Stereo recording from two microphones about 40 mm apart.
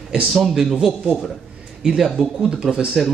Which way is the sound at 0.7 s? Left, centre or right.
Centre.